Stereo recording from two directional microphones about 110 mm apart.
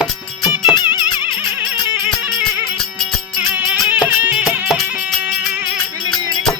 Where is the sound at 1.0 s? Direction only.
15° right (ahead or behind).